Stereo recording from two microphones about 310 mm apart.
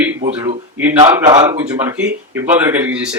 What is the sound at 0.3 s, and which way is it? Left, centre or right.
Speech, centre.